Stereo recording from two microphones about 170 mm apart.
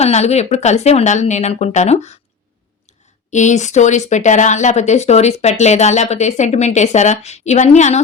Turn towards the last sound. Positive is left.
turn(degrees=40)  # may be behind; listen again after turning